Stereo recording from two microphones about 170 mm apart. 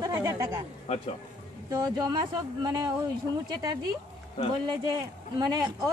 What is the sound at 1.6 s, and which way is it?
A woman's voice, 25° right (ahead or behind).